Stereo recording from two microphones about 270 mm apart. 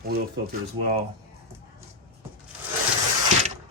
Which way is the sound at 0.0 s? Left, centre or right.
Right.